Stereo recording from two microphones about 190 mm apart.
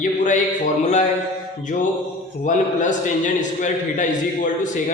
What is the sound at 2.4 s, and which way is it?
A man's voice, 40° left (ahead or behind).